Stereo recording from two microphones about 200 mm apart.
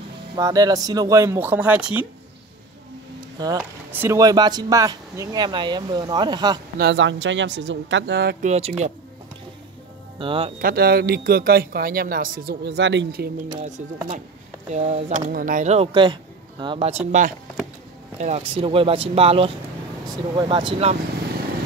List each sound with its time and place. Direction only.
0.4 s speech: 20° right (ahead or behind)
3.3 s speech: 20° right (ahead or behind)
6.8 s speech: 65° right (ahead or behind)
8.5 s speech: 30° right (ahead or behind)
10.1 s speech: 25° right (ahead or behind)
10.6 s speech: 50° right (ahead or behind)
14.7 s speech: 35° right (ahead or behind)
18.2 s speech: 30° right (ahead or behind)